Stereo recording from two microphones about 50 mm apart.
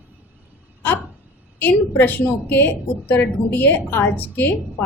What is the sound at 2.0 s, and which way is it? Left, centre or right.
A woman's voice, left.